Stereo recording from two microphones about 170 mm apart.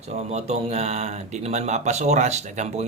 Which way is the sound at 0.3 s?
40° right (ahead or behind).